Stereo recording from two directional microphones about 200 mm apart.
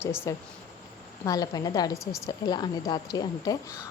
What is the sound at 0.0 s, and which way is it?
Speech, 10° left (ahead or behind).